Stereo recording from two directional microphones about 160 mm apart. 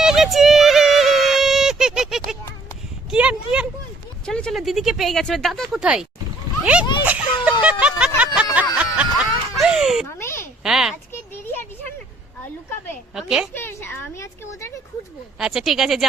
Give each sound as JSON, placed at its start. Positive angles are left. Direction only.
{"t": 0.0, "sound": "a sound", "side_deg": 0}
{"t": 4.3, "sound": "speech", "side_deg": 5}
{"t": 7.0, "sound": "a sound", "side_deg": -10}
{"t": 8.5, "sound": "snicker", "side_deg": -10}
{"t": 10.2, "sound": "a sound", "side_deg": 15}
{"t": 10.6, "sound": "speech", "side_deg": -5}
{"t": 13.1, "sound": "speech", "side_deg": -5}
{"t": 13.5, "sound": "speech", "side_deg": 15}
{"t": 15.4, "sound": "speech", "side_deg": 0}